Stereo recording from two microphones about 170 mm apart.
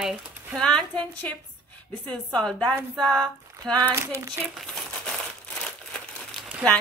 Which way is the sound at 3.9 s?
15° right (ahead or behind).